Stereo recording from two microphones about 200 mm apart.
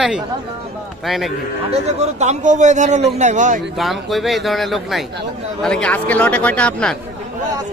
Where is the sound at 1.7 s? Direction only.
35° right (ahead or behind).